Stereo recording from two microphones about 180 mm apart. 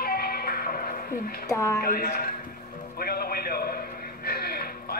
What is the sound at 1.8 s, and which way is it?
Speech, 60° left (ahead or behind).